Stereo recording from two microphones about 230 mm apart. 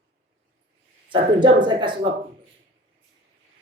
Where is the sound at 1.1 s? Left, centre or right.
Centre.